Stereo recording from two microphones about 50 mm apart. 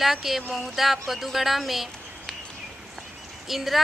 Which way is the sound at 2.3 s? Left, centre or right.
Centre.